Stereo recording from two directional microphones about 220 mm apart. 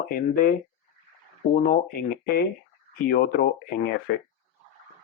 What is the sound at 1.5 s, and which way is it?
Speech, 35° left (ahead or behind).